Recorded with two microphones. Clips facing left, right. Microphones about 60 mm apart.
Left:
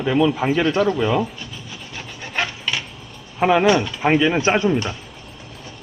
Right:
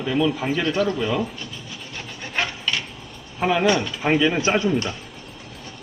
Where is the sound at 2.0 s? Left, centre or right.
Centre.